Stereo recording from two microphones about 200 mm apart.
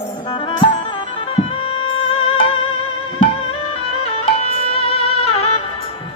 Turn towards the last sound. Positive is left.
turn(degrees=30)  # may be behind; listen again after turning